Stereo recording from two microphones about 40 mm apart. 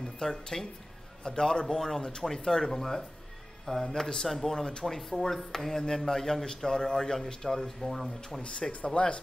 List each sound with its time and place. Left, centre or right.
0.0 s speech: centre
8.4 s speech: left